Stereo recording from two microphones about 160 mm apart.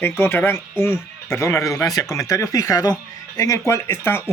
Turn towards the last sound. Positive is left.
turn(degrees=15)  # may be behind; listen again after turning